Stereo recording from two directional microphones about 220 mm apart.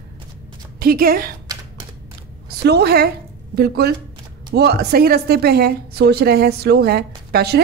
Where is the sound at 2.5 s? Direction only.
45° right (ahead or behind).